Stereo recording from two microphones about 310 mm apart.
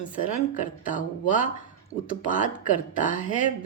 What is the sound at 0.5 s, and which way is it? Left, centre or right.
Speech, left.